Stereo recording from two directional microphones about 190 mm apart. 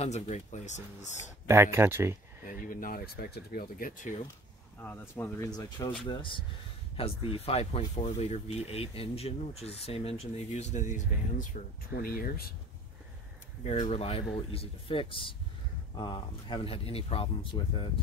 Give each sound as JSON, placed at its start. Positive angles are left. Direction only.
{"t": 0.0, "sound": "speech", "side_deg": 35}
{"t": 1.5, "sound": "speech", "side_deg": -15}
{"t": 2.4, "sound": "speech", "side_deg": 45}
{"t": 4.8, "sound": "speech", "side_deg": 10}
{"t": 13.7, "sound": "speech", "side_deg": 35}